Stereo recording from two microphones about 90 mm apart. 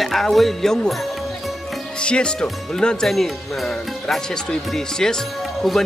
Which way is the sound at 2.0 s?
10° left (ahead or behind).